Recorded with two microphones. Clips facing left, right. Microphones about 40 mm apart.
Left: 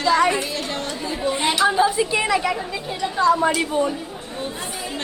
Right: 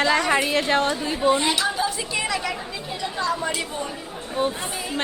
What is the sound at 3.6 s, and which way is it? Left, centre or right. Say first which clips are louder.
Speech: left 8 dB; left.